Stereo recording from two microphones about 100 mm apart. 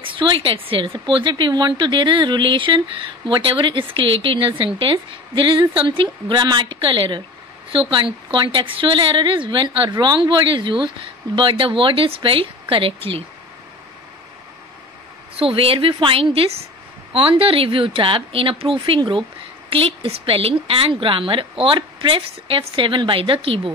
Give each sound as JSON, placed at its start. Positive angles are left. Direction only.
{"t": 0.0, "sound": "a woman's voice", "side_deg": -55}
{"t": 15.4, "sound": "speech", "side_deg": -65}